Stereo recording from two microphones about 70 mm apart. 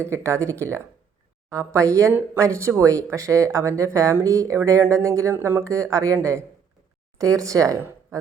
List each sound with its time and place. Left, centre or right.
0.0 s speech: right
5.3 s speech: right
7.2 s speech: right